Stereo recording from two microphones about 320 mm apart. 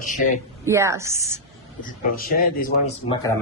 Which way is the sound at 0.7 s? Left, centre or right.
Centre.